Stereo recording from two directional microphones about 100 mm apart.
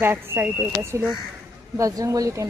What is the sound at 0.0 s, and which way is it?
A woman's voice, 25° right (ahead or behind).